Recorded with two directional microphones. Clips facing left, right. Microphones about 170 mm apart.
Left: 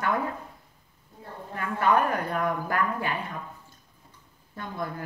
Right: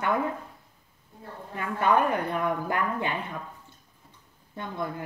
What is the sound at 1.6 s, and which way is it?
Speech, 20° right (ahead or behind).